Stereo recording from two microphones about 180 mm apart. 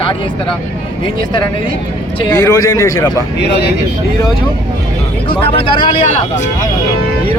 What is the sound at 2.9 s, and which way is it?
Speech, 70° left (ahead or behind).